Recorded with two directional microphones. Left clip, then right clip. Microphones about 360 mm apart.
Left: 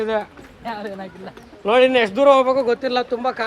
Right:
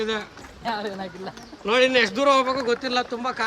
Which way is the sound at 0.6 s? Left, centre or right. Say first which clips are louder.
Right 1 dB; right.